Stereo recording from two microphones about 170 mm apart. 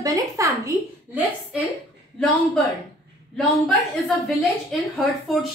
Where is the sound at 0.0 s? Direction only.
20° right (ahead or behind).